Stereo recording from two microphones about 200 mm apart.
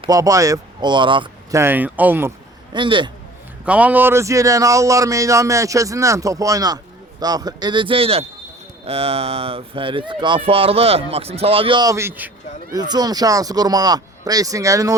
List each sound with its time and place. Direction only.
0.0 s speech: 15° right (ahead or behind)
2.7 s speech: 25° right (ahead or behind)
3.7 s speech: 5° right (ahead or behind)